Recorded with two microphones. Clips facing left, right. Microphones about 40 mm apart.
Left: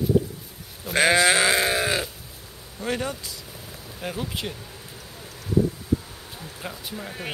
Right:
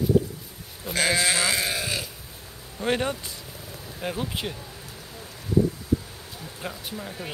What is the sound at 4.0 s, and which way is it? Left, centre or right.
Speech, centre.